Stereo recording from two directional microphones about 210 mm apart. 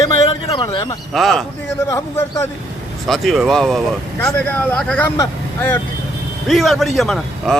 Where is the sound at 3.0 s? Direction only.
Centre (ahead or behind).